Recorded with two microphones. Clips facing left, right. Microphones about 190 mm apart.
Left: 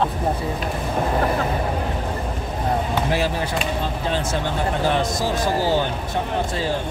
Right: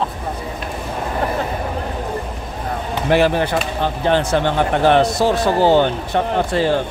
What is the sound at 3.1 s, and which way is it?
Speech, 65° right (ahead or behind).